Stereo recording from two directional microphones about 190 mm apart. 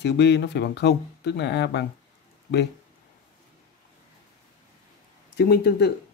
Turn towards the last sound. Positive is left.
turn(degrees=60)  # may be behind; listen again after turning